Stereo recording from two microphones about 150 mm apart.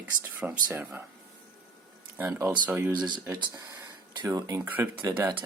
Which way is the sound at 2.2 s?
15° right (ahead or behind).